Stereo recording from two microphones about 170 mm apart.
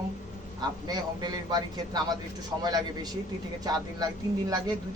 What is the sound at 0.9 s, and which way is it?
A man's voice, 25° right (ahead or behind).